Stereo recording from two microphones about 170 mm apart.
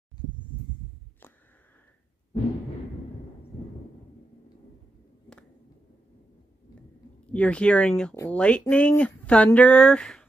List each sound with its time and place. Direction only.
7.3 s speech: 5° left (ahead or behind)